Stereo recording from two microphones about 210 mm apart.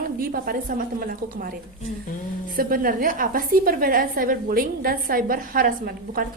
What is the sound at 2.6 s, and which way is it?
A woman's voice, 40° right (ahead or behind).